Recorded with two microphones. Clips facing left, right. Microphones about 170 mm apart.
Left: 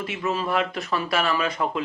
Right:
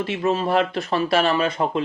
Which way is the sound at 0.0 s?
30° right (ahead or behind).